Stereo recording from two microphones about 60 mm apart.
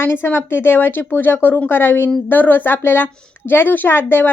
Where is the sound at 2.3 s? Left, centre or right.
Left.